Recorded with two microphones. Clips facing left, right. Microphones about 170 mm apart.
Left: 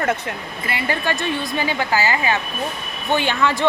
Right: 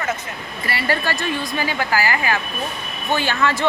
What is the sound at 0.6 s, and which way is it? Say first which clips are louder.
Speech: even; 20° left (ahead or behind).